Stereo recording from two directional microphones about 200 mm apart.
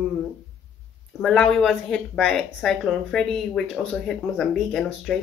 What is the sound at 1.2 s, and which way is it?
Speech, centre (ahead or behind).